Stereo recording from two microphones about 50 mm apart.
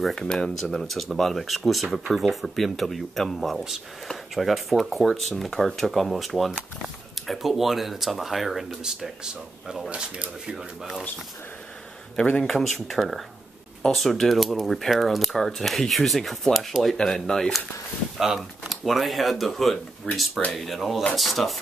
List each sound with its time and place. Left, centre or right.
0.1 s speech: centre
9.8 s speech: right
12.2 s speech: centre
12.4 s speech: centre
18.2 s speech: centre
20.1 s speech: centre
20.5 s speech: centre